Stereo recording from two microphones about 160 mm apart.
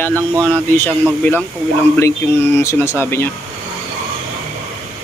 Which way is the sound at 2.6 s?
15° left (ahead or behind).